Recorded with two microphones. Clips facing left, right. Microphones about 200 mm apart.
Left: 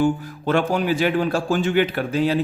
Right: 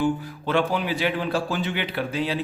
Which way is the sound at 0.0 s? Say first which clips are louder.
Left 4 dB; 45° left (ahead or behind).